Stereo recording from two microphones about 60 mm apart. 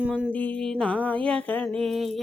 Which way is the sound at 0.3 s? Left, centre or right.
Left.